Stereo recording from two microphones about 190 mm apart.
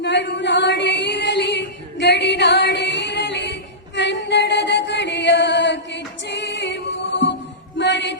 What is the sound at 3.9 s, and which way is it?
Music, 65° left (ahead or behind).